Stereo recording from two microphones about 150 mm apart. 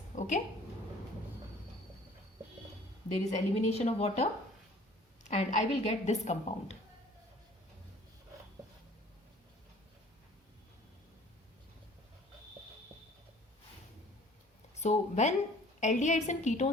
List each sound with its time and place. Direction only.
0.2 s a sound: 55° left (ahead or behind)
3.1 s a woman's voice: 45° left (ahead or behind)
5.3 s a woman's voice: 50° left (ahead or behind)
14.8 s a woman's voice: 50° left (ahead or behind)